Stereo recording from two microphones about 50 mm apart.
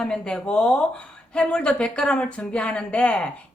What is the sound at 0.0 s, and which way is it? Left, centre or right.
Speech, centre.